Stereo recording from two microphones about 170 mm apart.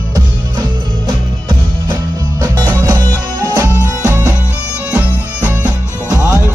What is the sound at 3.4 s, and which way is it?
Music, 15° right (ahead or behind).